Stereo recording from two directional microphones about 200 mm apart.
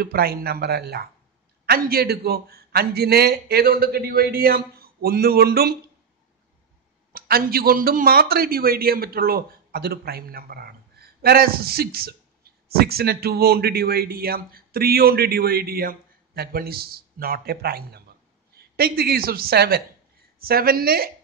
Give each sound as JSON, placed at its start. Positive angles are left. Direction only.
{"t": 0.0, "sound": "a man's voice", "side_deg": -50}
{"t": 7.1, "sound": "a man's voice", "side_deg": -50}